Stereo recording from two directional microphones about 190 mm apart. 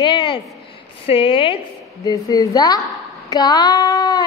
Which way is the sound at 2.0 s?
20° left (ahead or behind).